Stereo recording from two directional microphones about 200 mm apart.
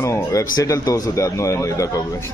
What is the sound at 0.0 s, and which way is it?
A man's voice, 15° left (ahead or behind).